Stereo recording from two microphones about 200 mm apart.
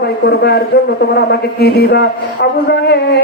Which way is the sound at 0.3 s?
55° left (ahead or behind).